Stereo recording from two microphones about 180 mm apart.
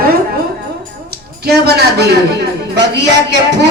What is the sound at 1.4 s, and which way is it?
A woman's voice, 65° right (ahead or behind).